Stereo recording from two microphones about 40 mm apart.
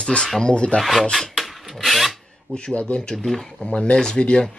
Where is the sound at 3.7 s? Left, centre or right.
Left.